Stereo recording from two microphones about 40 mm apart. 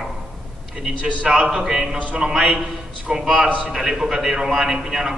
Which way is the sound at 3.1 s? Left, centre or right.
Centre.